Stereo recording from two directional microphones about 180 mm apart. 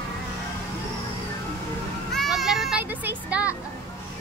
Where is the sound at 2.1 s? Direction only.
Centre (ahead or behind).